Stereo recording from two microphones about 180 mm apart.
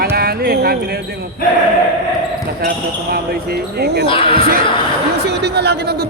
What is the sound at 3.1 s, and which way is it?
Speech, 60° right (ahead or behind).